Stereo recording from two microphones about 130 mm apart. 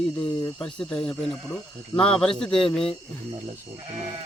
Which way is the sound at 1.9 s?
40° left (ahead or behind).